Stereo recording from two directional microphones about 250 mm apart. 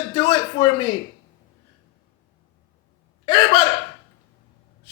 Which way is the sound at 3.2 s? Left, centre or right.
Centre.